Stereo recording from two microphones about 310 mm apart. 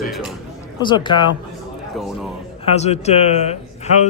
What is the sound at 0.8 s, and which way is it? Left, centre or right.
Speech, centre.